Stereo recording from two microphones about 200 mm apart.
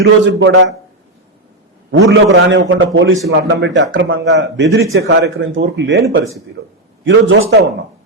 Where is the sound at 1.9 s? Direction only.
65° right (ahead or behind).